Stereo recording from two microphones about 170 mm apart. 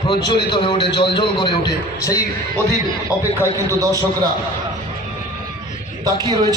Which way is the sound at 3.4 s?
20° right (ahead or behind).